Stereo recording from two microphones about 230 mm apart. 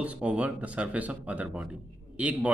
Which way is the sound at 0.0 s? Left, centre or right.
Centre.